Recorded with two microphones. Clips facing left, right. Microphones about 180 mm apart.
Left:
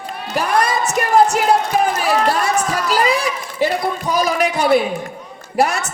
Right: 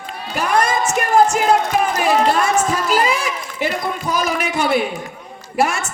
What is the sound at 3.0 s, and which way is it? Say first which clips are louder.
Speech: left 2 dB; 35° left (ahead or behind).